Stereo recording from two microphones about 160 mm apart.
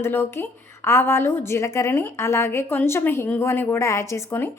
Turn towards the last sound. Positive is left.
turn(degrees=15)  # may be behind; listen again after turning